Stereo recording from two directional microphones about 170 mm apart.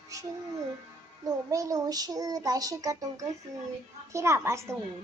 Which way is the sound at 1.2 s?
20° right (ahead or behind).